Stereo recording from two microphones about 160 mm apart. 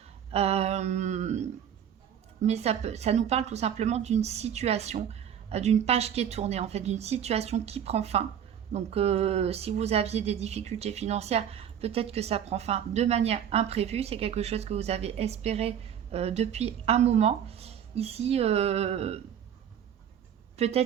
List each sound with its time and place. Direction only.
0.3 s humming: 40° right (ahead or behind)
2.4 s a woman's voice: 40° right (ahead or behind)
20.6 s a woman's voice: 40° right (ahead or behind)